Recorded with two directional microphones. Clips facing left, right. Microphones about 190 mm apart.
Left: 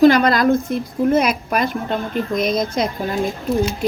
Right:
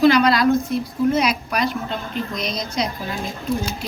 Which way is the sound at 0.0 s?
50° left (ahead or behind).